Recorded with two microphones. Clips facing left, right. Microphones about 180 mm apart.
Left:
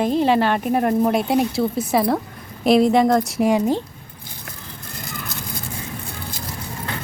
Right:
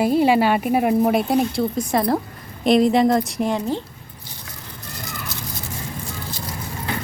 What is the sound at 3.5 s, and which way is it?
Speech, 10° left (ahead or behind).